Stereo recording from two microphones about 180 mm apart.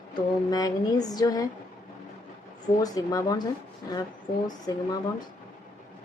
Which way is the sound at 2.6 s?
20° left (ahead or behind).